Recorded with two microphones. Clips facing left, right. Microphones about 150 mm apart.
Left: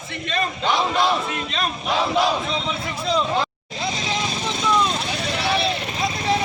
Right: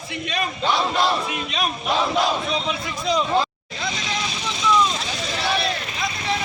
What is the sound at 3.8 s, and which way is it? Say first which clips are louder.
Vehicle: left 2 dB; 30° left (ahead or behind).